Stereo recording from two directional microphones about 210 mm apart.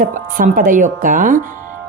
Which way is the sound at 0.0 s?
40° right (ahead or behind).